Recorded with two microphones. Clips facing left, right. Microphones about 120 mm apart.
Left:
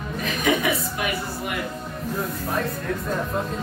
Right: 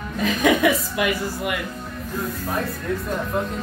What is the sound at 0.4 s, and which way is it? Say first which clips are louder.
A woman's voice: right 4 dB; 90° right.